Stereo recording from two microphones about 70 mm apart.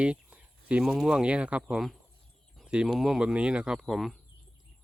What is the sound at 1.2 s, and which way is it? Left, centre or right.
Speech, centre.